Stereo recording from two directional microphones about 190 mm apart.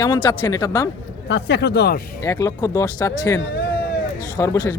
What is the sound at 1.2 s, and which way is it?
Speech, 65° left (ahead or behind).